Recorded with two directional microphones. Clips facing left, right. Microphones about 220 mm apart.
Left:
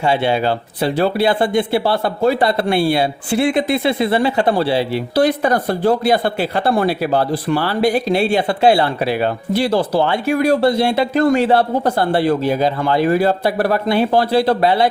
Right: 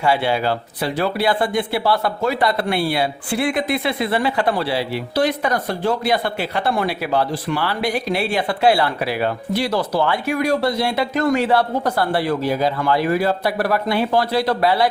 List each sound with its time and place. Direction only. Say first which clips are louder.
0.0 s speech: left 2 dB; 25° left (ahead or behind)